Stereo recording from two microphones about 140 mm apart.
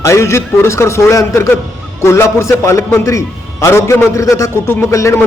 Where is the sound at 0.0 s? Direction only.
20° left (ahead or behind).